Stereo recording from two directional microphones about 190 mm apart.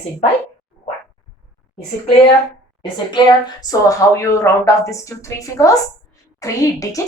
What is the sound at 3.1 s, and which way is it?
A woman's voice, 20° left (ahead or behind).